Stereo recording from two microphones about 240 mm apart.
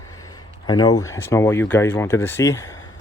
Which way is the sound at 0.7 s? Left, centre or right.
Centre.